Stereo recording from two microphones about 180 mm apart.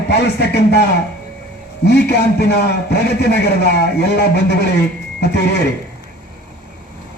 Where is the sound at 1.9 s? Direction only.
65° left (ahead or behind).